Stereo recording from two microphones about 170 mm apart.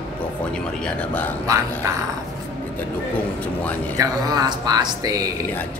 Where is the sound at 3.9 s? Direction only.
20° right (ahead or behind).